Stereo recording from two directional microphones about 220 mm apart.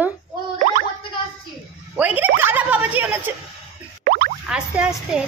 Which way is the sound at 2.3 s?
10° right (ahead or behind).